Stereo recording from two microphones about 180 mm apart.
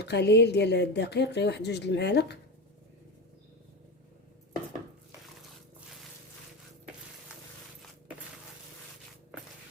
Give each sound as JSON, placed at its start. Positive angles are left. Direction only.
{"t": 0.0, "sound": "a woman's voice", "side_deg": 70}